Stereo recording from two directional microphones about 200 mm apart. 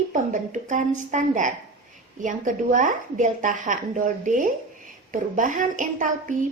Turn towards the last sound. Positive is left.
turn(degrees=-40)  # may be behind; listen again after turning